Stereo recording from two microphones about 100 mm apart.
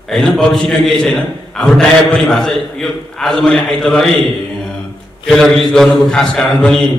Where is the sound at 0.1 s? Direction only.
5° left (ahead or behind).